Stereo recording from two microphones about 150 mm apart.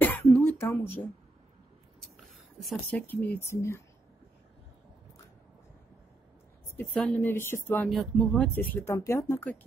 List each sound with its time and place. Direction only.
0.0 s throat clearing: 10° left (ahead or behind)
2.1 s speech: centre (ahead or behind); by 3.8 s 20° left (ahead or behind)
6.9 s speech: 5° left (ahead or behind)
7.9 s speech: centre (ahead or behind)